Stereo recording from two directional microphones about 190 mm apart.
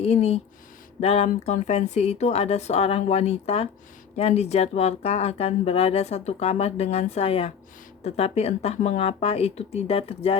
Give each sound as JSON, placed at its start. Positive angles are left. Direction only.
{"t": 0.0, "sound": "speech", "side_deg": 35}